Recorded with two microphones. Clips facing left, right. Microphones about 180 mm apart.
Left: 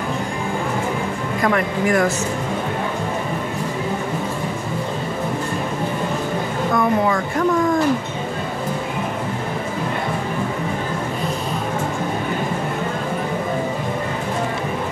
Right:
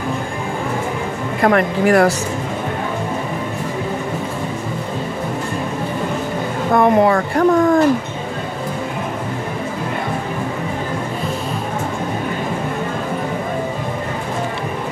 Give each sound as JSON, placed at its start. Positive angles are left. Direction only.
{"t": 1.4, "sound": "speech", "side_deg": -60}
{"t": 6.7, "sound": "speech", "side_deg": -55}